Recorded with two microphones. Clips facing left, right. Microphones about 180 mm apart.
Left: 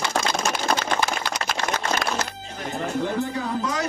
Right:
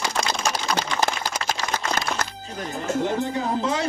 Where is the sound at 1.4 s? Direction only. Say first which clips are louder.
Left 1 dB; 60° left (ahead or behind).